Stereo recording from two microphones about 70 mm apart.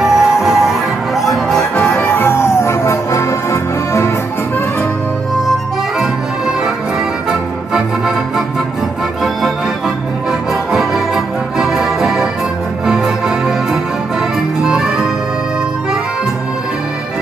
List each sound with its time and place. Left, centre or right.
0.0 s music: centre
2.0 s music: left
5.9 s accordion: centre
10.5 s music: centre